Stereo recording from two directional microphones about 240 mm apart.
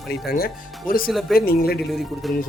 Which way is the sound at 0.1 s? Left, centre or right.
Left.